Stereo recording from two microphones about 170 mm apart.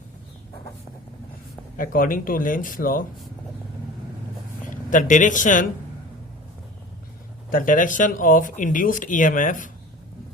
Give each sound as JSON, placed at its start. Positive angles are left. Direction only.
{"t": 1.7, "sound": "speech", "side_deg": 55}
{"t": 4.7, "sound": "speech", "side_deg": 50}
{"t": 7.5, "sound": "speech", "side_deg": 50}